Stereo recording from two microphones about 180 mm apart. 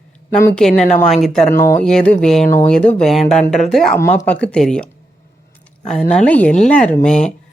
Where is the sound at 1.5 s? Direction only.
15° left (ahead or behind).